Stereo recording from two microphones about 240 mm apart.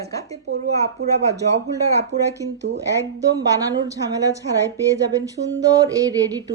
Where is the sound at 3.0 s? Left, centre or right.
Centre.